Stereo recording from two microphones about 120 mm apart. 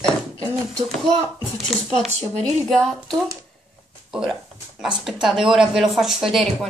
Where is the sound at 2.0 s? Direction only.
65° right (ahead or behind).